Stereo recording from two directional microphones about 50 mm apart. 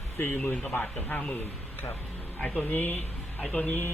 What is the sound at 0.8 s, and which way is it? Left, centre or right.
Speech, left.